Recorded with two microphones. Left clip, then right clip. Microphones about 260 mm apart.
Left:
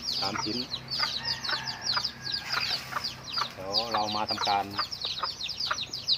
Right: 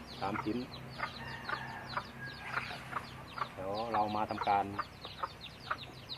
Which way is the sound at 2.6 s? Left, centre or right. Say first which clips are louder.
Left 5 dB; left.